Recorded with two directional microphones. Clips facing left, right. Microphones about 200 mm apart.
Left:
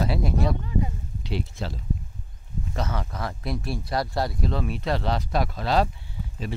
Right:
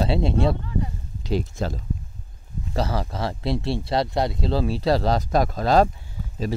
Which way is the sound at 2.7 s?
35° right (ahead or behind).